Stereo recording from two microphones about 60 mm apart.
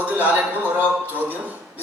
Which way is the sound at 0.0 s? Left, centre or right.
Right.